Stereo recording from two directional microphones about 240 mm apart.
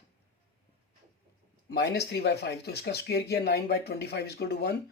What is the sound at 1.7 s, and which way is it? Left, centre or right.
Speech, left.